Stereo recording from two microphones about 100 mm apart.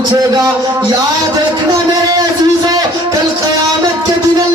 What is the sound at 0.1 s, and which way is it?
Speech, 40° right (ahead or behind).